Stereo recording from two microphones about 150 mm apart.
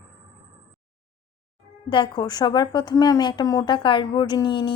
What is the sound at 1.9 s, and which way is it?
A woman's voice, 30° left (ahead or behind).